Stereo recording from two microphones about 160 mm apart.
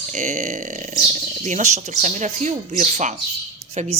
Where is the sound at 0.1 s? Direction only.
50° right (ahead or behind).